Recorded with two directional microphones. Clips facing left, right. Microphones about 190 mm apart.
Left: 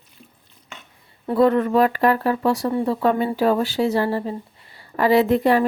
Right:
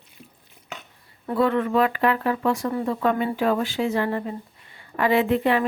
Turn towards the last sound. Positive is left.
turn(degrees=40)  # may be behind; listen again after turning